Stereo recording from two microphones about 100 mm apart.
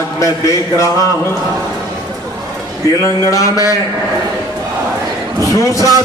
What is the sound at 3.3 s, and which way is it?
Speech, 35° left (ahead or behind).